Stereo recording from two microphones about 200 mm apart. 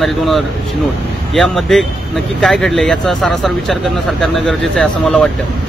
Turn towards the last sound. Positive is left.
turn(degrees=5)  # may be behind; listen again after turning